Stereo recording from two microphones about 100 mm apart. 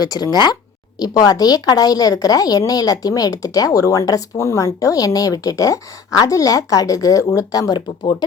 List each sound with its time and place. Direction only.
0.0 s a woman's voice: 40° left (ahead or behind)